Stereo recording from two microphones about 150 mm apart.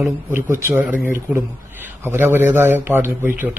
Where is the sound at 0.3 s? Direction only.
15° right (ahead or behind).